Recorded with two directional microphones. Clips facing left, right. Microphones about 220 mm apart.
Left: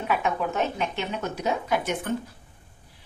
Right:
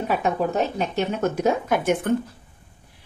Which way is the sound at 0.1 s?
35° right (ahead or behind).